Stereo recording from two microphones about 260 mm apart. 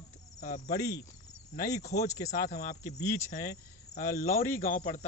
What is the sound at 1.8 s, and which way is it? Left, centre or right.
Speech, left.